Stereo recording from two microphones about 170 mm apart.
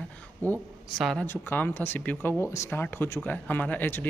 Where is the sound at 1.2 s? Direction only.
10° left (ahead or behind).